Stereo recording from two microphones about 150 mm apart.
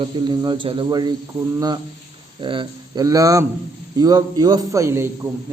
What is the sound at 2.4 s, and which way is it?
Speech, 35° right (ahead or behind).